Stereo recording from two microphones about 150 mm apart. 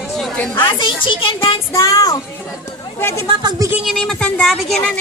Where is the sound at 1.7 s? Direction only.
20° left (ahead or behind).